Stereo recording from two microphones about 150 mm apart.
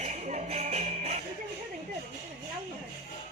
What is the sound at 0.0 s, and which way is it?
Music, 50° right (ahead or behind).